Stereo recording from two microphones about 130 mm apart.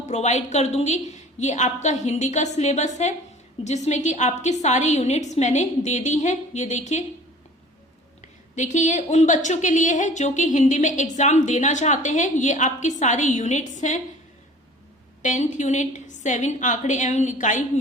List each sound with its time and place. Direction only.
0.0 s a woman's voice: 60° left (ahead or behind)
8.5 s a woman's voice: 70° left (ahead or behind)
15.2 s a woman's voice: 70° left (ahead or behind)